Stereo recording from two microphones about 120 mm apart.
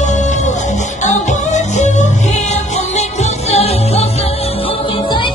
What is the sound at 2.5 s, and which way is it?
Music, 70° left (ahead or behind).